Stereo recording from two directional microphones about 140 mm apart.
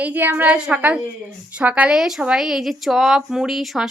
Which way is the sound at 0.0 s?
15° right (ahead or behind).